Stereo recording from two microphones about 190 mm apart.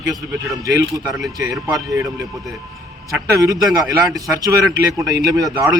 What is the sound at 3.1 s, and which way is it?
Speech, 15° right (ahead or behind).